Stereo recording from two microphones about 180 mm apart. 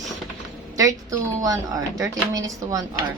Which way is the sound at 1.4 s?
20° right (ahead or behind).